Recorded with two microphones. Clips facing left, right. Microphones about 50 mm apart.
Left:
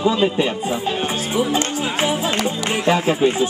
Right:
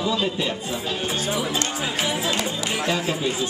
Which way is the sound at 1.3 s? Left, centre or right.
Left.